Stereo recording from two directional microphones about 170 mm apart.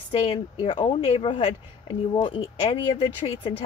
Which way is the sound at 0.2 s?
30° left (ahead or behind).